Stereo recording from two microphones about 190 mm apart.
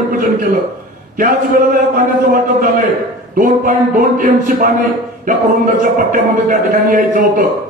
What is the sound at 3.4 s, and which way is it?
Speech, 45° right (ahead or behind).